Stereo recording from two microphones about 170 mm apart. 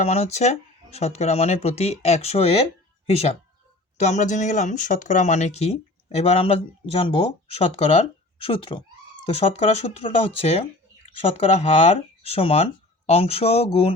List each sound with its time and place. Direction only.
0.0 s speech: 40° left (ahead or behind)